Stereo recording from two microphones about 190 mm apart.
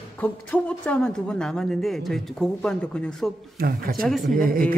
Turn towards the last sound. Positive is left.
turn(degrees=-50)  # may be behind; listen again after turning